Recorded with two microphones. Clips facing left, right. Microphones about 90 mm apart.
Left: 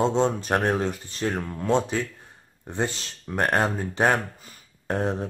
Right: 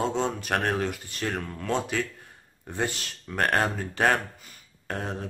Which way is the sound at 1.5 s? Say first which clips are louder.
Left 5 dB; 20° left (ahead or behind).